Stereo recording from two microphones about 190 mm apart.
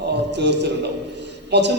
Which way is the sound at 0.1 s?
65° right (ahead or behind).